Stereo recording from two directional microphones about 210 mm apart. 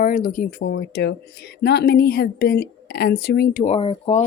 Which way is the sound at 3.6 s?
30° left (ahead or behind).